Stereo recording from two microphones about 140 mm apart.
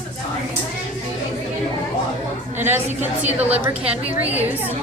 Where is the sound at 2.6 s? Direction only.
15° right (ahead or behind).